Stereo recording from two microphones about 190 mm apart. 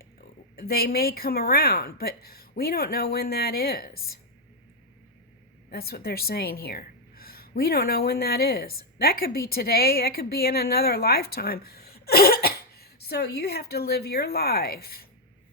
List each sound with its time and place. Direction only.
0.6 s a woman's voice: 55° left (ahead or behind)
5.7 s a woman's voice: 55° left (ahead or behind)